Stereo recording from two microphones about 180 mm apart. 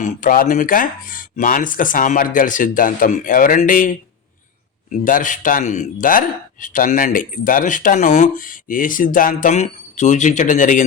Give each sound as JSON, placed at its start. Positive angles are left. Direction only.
{"t": 0.0, "sound": "speech", "side_deg": 50}